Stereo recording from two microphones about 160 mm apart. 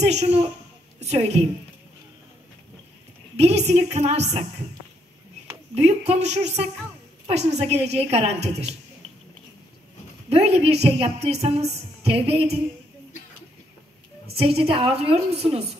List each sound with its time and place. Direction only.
0.0 s a woman's voice: 45° right (ahead or behind)
3.3 s a woman's voice: 45° right (ahead or behind)
5.8 s a woman's voice: 40° right (ahead or behind)
10.3 s a woman's voice: 40° right (ahead or behind)
14.3 s a woman's voice: 35° right (ahead or behind)